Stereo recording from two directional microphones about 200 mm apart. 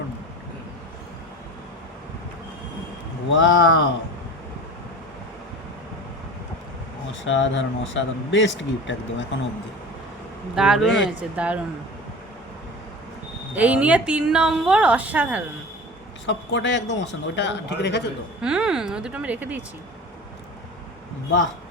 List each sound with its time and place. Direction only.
3.3 s speech: 70° left (ahead or behind)
7.1 s speech: 70° left (ahead or behind)
10.5 s speech: 5° right (ahead or behind)
13.6 s speech: 5° right (ahead or behind)
16.2 s a man's voice: 65° left (ahead or behind)
18.4 s speech: 5° right (ahead or behind)